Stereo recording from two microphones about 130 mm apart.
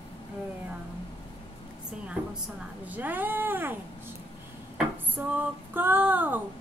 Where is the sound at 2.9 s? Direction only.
15° right (ahead or behind).